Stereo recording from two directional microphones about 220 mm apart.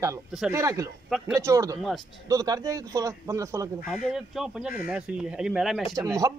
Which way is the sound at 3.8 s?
Centre (ahead or behind).